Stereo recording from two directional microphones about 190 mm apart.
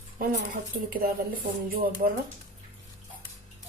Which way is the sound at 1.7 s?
50° right (ahead or behind).